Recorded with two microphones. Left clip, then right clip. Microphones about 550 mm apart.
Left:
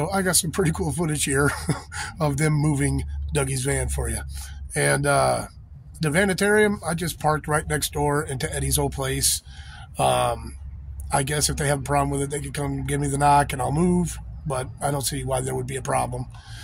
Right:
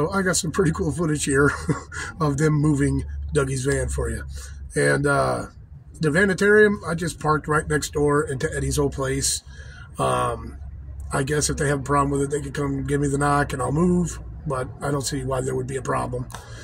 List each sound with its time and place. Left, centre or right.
0.0 s speech: left